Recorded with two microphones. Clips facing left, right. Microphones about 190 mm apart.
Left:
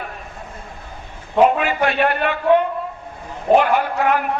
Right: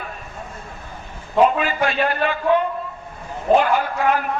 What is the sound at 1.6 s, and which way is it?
Speech, 65° left (ahead or behind).